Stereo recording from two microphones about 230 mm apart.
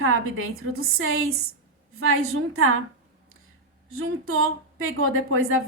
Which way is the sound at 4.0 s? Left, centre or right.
Right.